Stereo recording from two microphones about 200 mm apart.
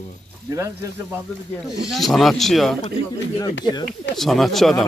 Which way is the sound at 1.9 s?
Centre (ahead or behind).